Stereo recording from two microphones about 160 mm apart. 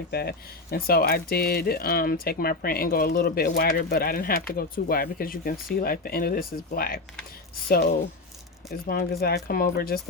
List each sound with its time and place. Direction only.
0.1 s speech: 80° left